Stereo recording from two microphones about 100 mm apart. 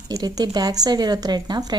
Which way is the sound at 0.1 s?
40° right (ahead or behind).